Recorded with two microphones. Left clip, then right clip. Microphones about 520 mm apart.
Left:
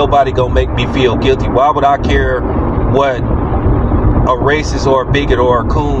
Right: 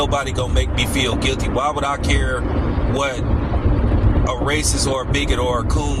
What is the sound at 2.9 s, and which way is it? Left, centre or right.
Speech, right.